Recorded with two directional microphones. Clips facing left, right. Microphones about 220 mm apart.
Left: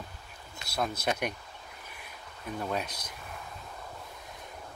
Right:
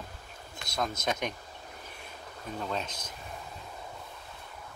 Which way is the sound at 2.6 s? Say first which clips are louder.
Left 1 dB; 10° left (ahead or behind).